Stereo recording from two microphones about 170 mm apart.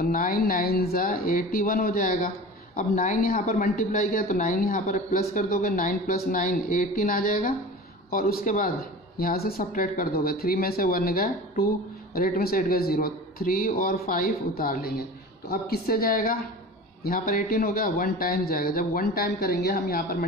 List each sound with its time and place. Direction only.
0.0 s speech: 55° left (ahead or behind)